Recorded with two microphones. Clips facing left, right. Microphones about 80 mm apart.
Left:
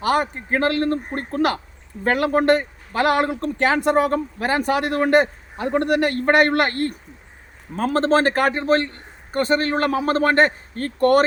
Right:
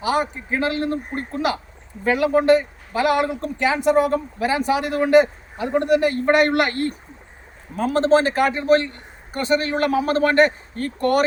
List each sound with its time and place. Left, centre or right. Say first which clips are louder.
0.0 s a man's voice: left 1 dB; left